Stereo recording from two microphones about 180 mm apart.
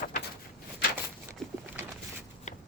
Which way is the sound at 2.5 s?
40° left (ahead or behind).